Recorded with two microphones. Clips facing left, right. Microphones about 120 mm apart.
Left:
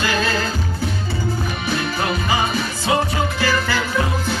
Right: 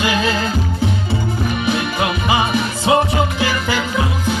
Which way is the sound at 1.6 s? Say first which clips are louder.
Right 2 dB; 20° right (ahead or behind).